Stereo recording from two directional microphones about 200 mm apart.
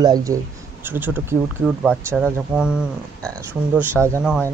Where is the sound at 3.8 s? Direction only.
10° right (ahead or behind).